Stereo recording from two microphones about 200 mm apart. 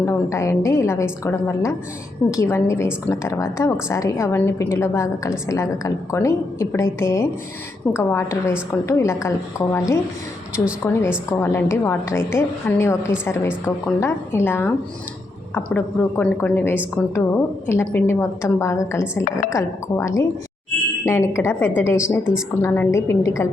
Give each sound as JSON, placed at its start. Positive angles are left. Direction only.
{"t": 0.0, "sound": "a woman's voice", "side_deg": 15}